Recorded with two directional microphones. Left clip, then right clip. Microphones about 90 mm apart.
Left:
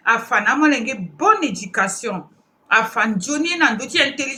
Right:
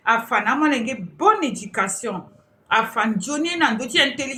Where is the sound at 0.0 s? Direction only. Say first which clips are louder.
Left 2 dB; 25° left (ahead or behind).